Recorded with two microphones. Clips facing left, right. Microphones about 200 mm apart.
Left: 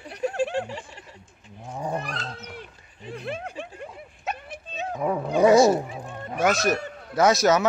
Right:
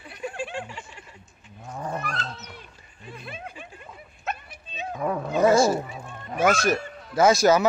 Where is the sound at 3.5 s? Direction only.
75° left (ahead or behind).